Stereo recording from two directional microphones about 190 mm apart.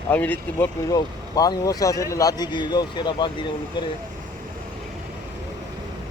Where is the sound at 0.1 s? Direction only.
10° left (ahead or behind).